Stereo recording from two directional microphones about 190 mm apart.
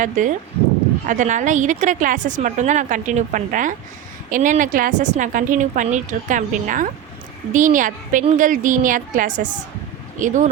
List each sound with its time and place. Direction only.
0.2 s a woman's voice: 40° right (ahead or behind)